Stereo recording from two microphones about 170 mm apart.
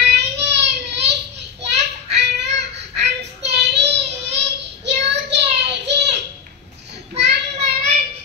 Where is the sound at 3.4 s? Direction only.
90° right.